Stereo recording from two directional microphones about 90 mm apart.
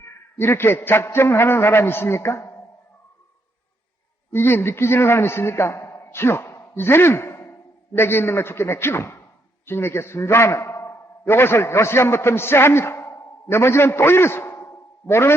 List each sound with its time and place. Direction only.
0.0 s a man's voice: 25° left (ahead or behind)
4.3 s a man's voice: 25° left (ahead or behind)